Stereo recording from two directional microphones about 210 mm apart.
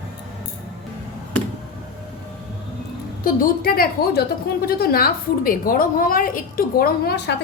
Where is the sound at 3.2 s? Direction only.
45° left (ahead or behind).